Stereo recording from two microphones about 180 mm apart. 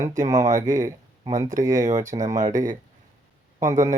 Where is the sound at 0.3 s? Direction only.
45° right (ahead or behind).